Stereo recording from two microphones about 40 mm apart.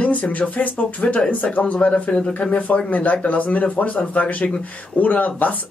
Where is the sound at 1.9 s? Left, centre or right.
Left.